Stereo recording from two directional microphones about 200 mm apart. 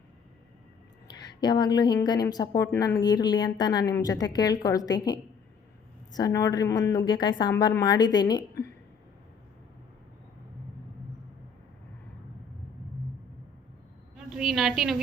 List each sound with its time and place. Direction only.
1.1 s a woman's voice: 20° left (ahead or behind)
14.3 s a woman's voice: centre (ahead or behind)